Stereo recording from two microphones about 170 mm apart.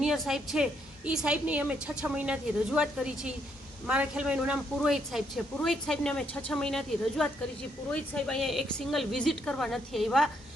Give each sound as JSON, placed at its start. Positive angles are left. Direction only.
{"t": 0.0, "sound": "speech", "side_deg": 0}